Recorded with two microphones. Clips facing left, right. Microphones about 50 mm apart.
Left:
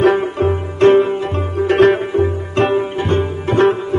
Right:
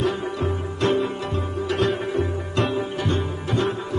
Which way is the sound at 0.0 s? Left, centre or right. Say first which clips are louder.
Left 10 dB; left.